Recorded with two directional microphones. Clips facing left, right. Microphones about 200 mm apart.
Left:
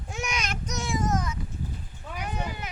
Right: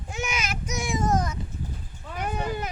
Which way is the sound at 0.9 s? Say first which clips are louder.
Right 3 dB; 30° right (ahead or behind).